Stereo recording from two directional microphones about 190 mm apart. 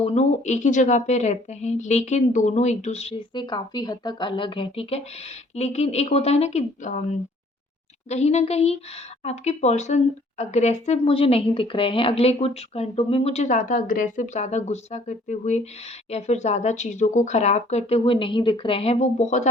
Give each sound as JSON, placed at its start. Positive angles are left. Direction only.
{"t": 0.0, "sound": "a woman's voice", "side_deg": 35}